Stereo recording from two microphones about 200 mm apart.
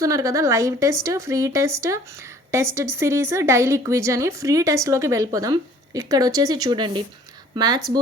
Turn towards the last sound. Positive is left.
turn(degrees=-20)  # may be behind; listen again after turning